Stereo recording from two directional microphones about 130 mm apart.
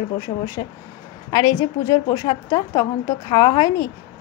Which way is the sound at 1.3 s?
25° left (ahead or behind).